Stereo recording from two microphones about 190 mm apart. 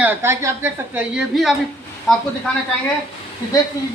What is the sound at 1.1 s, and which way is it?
Speech, centre (ahead or behind).